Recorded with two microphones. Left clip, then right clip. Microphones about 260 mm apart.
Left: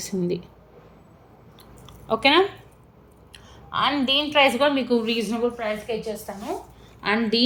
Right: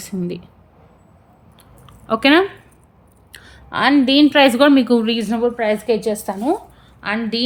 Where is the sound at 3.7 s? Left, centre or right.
Right.